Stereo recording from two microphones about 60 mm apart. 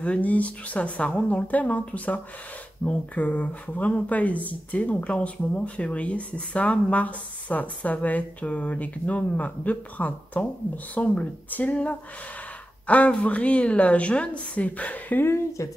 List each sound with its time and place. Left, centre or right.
0.0 s speech: left
15.2 s speech: left